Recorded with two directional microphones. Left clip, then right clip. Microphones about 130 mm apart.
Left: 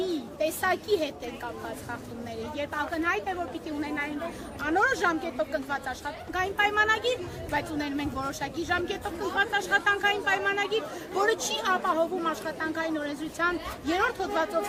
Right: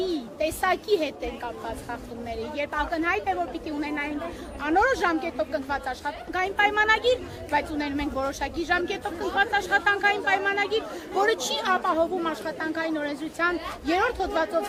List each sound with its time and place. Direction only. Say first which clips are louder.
0.0 s a woman's voice: right 2 dB; 40° left (ahead or behind)